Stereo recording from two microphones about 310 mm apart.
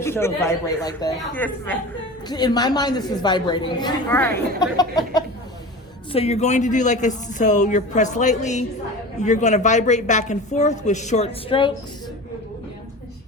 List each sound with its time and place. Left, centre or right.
0.0 s a woman's voice: centre